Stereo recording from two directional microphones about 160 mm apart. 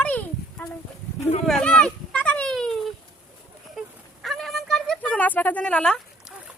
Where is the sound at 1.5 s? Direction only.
5° left (ahead or behind).